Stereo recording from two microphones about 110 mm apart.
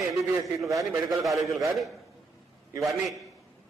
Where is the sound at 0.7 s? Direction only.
30° right (ahead or behind).